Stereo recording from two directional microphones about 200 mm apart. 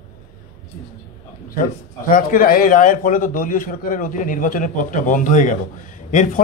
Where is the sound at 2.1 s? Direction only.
45° left (ahead or behind).